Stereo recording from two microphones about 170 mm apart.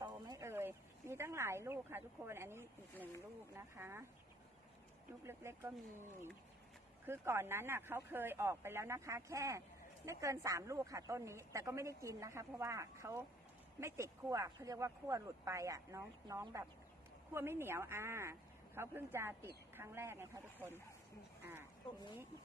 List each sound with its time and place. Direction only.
0.0 s a sound: 20° right (ahead or behind)
3.5 s a woman's voice: 15° right (ahead or behind)
5.2 s a woman's voice: 15° right (ahead or behind)